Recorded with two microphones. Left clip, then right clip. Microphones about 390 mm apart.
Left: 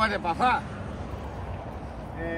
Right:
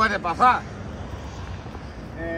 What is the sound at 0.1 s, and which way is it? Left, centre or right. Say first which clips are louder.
Speech: right 6 dB; centre.